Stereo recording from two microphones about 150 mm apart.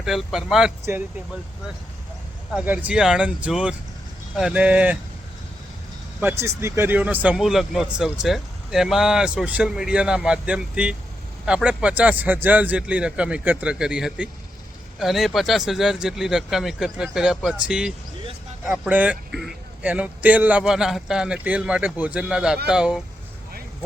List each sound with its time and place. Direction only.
0.0 s speech: centre (ahead or behind)
2.5 s speech: 5° right (ahead or behind)
6.1 s speech: 15° right (ahead or behind)